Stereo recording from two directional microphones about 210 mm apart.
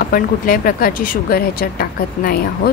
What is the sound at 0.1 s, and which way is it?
Speech, 40° left (ahead or behind).